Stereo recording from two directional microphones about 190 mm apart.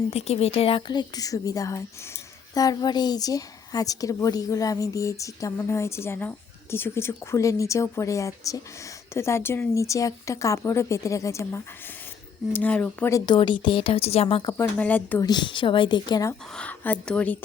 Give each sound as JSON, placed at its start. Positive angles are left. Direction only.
{"t": 0.1, "sound": "a woman's voice", "side_deg": 35}
{"t": 14.6, "sound": "a woman's voice", "side_deg": 10}
{"t": 15.3, "sound": "speech", "side_deg": 25}
{"t": 16.6, "sound": "a woman's voice", "side_deg": 10}